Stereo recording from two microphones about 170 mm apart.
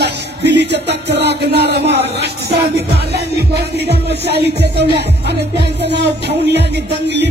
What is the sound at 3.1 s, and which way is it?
Music, 75° right (ahead or behind).